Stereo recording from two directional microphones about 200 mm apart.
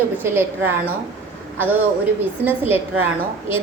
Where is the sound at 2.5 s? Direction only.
10° right (ahead or behind).